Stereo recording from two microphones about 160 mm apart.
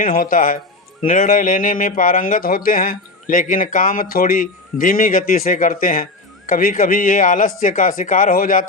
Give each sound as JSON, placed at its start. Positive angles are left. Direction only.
{"t": 0.0, "sound": "speech", "side_deg": 60}